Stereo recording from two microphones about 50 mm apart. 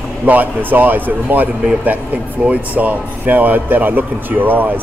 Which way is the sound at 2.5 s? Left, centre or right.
Right.